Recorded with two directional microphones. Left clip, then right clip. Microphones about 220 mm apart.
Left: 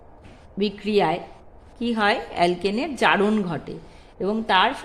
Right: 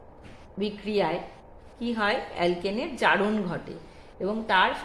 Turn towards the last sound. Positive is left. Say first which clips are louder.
# left 4 dB
turn(degrees=35)  # may be behind; listen again after turning